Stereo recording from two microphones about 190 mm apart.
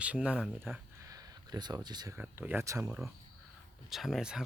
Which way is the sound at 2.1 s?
10° right (ahead or behind).